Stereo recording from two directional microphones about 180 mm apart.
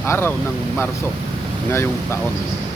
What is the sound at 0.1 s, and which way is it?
Speech, 10° left (ahead or behind).